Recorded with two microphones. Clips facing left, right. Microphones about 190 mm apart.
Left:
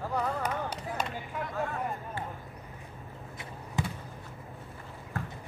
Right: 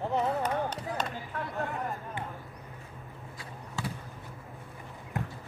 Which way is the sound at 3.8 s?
15° left (ahead or behind).